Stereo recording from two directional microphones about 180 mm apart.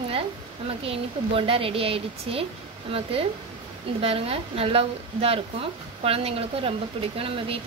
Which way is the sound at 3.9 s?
30° right (ahead or behind).